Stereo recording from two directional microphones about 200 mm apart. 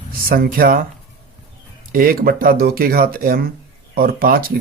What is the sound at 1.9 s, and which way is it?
Speech, 45° right (ahead or behind).